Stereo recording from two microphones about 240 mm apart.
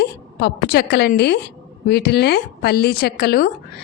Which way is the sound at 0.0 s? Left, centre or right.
Left.